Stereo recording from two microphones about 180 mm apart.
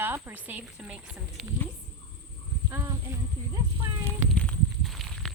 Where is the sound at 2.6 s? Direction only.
15° right (ahead or behind).